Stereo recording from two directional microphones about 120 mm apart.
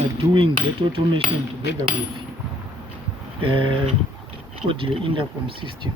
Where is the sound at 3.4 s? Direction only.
45° right (ahead or behind).